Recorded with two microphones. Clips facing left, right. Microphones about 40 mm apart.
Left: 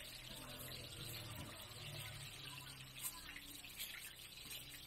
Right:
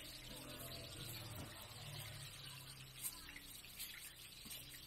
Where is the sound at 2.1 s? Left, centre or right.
Centre.